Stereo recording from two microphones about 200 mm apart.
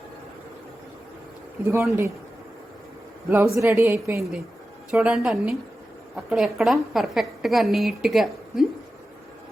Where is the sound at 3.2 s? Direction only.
10° right (ahead or behind).